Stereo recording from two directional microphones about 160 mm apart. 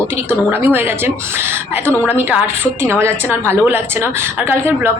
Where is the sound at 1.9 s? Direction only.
10° left (ahead or behind).